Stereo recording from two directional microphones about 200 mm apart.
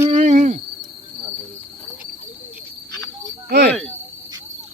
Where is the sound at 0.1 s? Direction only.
35° right (ahead or behind).